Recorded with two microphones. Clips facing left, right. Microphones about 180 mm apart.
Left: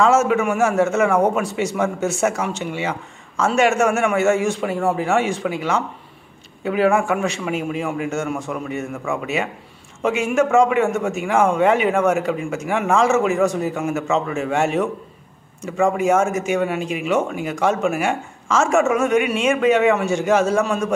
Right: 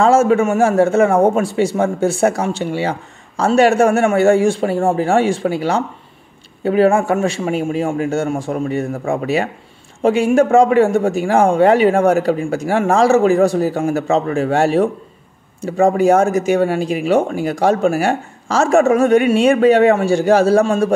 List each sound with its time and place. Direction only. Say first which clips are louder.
0.0 s a man's voice: right 4 dB; 30° right (ahead or behind)